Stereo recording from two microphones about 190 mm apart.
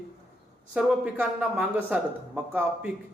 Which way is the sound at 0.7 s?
5° right (ahead or behind).